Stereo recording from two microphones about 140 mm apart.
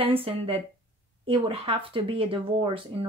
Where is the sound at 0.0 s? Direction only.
40° right (ahead or behind).